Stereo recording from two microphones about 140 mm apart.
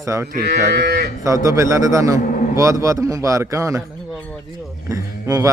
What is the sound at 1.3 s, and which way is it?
Speech, 25° right (ahead or behind).